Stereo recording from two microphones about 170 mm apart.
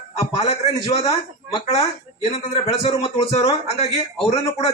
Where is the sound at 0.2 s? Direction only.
40° left (ahead or behind).